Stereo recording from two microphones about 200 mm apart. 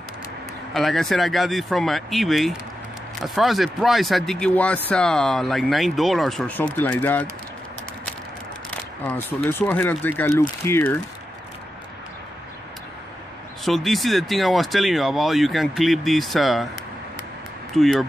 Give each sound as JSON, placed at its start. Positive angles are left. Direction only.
{"t": 0.7, "sound": "speech", "side_deg": 0}
{"t": 8.6, "sound": "speech", "side_deg": 5}
{"t": 13.7, "sound": "speech", "side_deg": 0}
{"t": 17.7, "sound": "speech", "side_deg": 0}